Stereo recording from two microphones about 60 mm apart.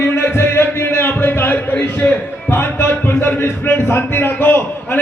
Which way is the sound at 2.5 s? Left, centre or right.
Left.